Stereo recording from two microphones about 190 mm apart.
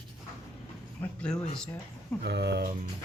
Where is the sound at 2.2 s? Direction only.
60° right (ahead or behind).